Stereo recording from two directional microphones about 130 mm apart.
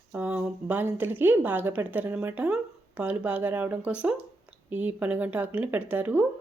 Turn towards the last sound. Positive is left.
turn(degrees=-15)  # may be behind; listen again after turning